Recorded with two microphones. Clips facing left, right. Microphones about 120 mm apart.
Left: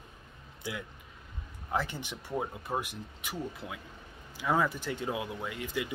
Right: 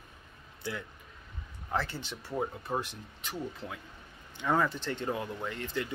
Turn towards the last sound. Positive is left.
turn(degrees=10)  # may be behind; listen again after turning